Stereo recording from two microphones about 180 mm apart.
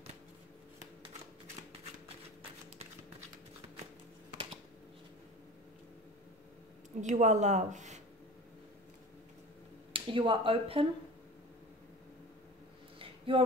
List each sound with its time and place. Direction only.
7.0 s speech: 40° right (ahead or behind)
9.9 s speech: 30° right (ahead or behind)
13.3 s speech: 30° right (ahead or behind)